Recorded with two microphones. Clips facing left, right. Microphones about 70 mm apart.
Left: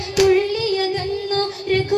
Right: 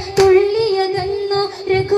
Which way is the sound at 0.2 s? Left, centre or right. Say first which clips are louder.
Right 5 dB; right.